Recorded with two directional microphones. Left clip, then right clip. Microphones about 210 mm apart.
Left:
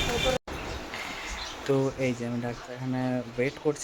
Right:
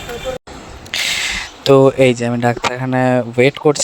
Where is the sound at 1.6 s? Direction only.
45° right (ahead or behind).